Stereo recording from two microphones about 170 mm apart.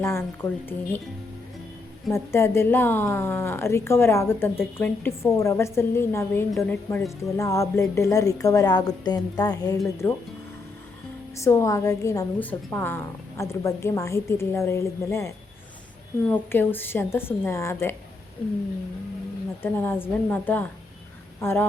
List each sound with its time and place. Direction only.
0.0 s a woman's voice: 15° left (ahead or behind)
2.1 s a woman's voice: 15° left (ahead or behind)
10.0 s a woman's voice: 10° left (ahead or behind)
11.3 s a woman's voice: 15° left (ahead or behind)
16.3 s a woman's voice: 10° left (ahead or behind)
19.6 s a woman's voice: 10° left (ahead or behind)